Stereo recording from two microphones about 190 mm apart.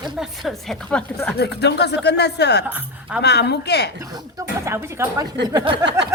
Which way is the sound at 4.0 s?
15° right (ahead or behind).